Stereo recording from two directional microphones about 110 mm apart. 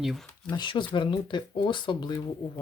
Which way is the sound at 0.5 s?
45° left (ahead or behind).